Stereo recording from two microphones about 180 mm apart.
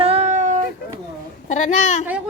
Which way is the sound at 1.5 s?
40° left (ahead or behind).